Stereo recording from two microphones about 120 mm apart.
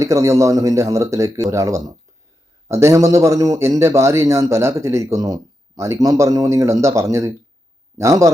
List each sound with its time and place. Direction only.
0.0 s a man's voice: 25° right (ahead or behind)